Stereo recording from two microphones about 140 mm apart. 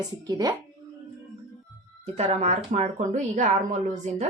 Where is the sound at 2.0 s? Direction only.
50° right (ahead or behind).